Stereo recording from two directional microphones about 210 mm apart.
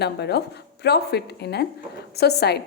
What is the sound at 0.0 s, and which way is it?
A woman's voice, 50° left (ahead or behind).